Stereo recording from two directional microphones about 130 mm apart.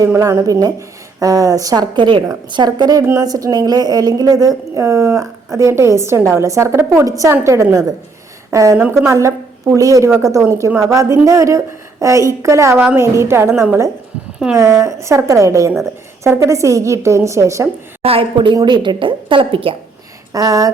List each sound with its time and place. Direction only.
0.0 s a woman's voice: 20° right (ahead or behind)
18.0 s a woman's voice: 45° right (ahead or behind)
20.3 s a woman's voice: 25° right (ahead or behind)